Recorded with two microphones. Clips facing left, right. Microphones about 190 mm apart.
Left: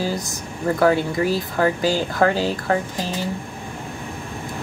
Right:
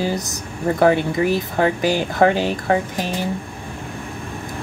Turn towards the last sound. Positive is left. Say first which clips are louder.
# right 2 dB
turn(degrees=-15)  # may be behind; listen again after turning